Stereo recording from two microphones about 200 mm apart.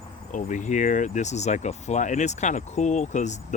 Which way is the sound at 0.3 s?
40° left (ahead or behind).